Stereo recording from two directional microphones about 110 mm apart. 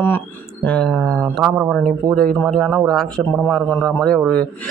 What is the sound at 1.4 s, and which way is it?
A man's voice, 5° right (ahead or behind).